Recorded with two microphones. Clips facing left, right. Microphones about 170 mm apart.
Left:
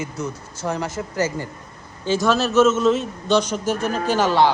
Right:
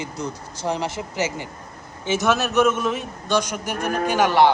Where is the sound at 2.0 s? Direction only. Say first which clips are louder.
Left 2 dB; 20° right (ahead or behind).